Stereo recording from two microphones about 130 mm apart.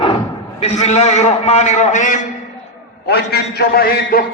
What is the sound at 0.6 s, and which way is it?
A man's voice, 60° left (ahead or behind).